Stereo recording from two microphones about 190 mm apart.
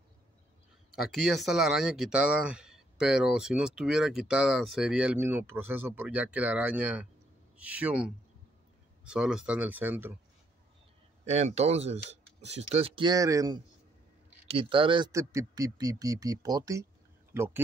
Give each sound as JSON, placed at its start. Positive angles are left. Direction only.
{"t": 0.9, "sound": "speech", "side_deg": 0}
{"t": 11.2, "sound": "speech", "side_deg": -35}
{"t": 14.5, "sound": "speech", "side_deg": -30}